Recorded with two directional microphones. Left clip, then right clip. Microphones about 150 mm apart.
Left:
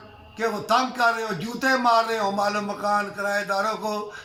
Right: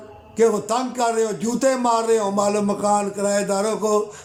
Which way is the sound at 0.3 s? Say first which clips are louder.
Right 4 dB; 30° right (ahead or behind).